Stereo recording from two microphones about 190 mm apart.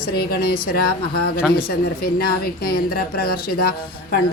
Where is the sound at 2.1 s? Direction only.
55° left (ahead or behind).